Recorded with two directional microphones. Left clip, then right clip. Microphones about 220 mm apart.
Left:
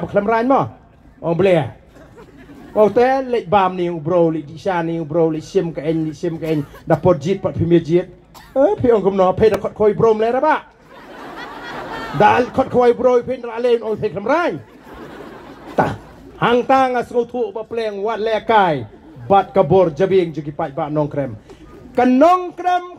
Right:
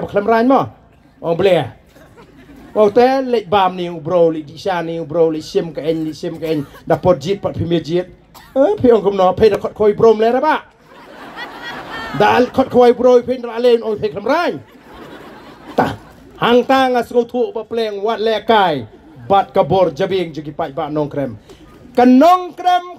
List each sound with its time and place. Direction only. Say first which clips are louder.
0.0 s speech: right 3 dB; 15° right (ahead or behind)
2.7 s speech: right 2 dB; 15° right (ahead or behind)
11.3 s a sound: right 2 dB; 35° right (ahead or behind)
12.2 s speech: right 1 dB; 15° right (ahead or behind)
15.7 s speech: right 1 dB; 15° right (ahead or behind)